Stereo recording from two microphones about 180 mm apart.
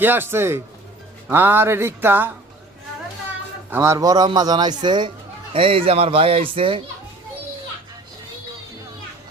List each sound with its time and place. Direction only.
0.0 s speech: 10° right (ahead or behind)
3.7 s a man's voice: 15° right (ahead or behind); by 6.8 s 30° right (ahead or behind)